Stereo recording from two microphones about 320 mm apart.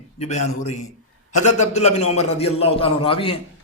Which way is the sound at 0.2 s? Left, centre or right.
Left.